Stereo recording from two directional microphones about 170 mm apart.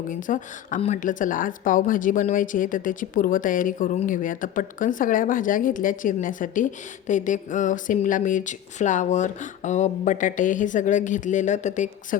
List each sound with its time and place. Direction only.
0.1 s speech: 50° left (ahead or behind)